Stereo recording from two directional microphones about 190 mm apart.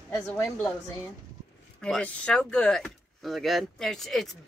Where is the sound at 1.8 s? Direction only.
5° left (ahead or behind).